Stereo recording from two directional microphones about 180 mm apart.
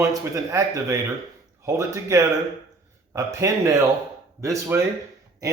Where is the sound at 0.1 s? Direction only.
20° right (ahead or behind).